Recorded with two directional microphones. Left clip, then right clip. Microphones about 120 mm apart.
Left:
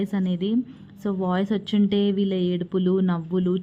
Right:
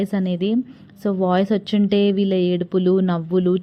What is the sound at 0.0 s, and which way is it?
A woman's voice, 30° right (ahead or behind).